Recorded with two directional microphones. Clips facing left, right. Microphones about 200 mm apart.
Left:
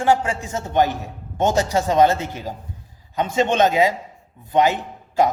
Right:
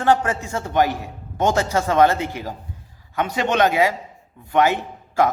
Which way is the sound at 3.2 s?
20° left (ahead or behind).